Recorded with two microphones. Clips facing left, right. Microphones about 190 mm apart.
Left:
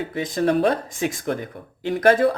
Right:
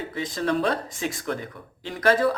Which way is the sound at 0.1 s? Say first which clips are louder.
Left 5 dB; 50° left (ahead or behind).